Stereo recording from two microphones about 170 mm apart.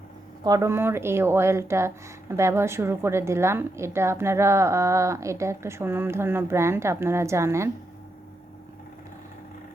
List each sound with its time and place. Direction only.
0.4 s a woman's voice: 20° right (ahead or behind)